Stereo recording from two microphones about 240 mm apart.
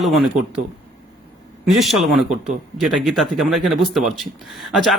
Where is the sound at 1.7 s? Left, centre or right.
Centre.